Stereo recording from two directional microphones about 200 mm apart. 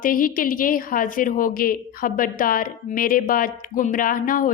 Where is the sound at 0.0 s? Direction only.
45° left (ahead or behind).